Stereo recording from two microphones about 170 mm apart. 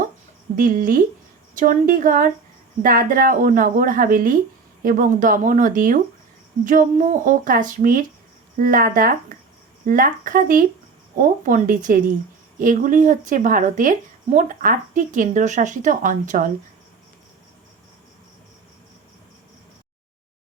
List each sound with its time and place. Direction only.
0.5 s speech: 55° right (ahead or behind)